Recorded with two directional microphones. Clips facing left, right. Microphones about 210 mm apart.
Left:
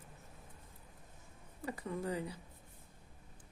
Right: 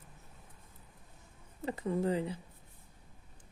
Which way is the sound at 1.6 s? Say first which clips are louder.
Right 7 dB; 25° right (ahead or behind).